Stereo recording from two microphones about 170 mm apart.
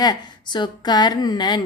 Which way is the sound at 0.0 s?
25° left (ahead or behind).